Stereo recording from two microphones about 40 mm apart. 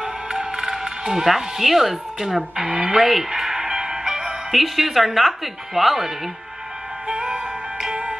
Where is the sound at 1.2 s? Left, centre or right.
Centre.